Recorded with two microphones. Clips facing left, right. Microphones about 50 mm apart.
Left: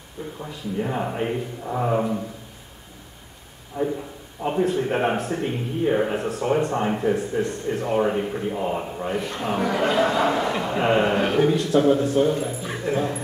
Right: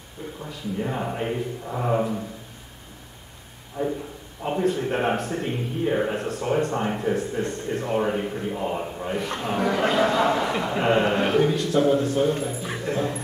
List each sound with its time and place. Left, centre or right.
0.4 s a man's voice: centre
3.8 s a man's voice: centre
4.4 s a man's voice: centre
12.3 s a man's voice: centre
12.6 s speech: centre